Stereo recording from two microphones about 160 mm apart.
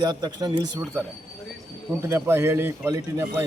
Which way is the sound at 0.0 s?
25° right (ahead or behind).